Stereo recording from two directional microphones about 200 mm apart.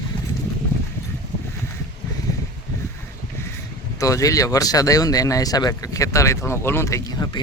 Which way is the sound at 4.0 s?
15° left (ahead or behind).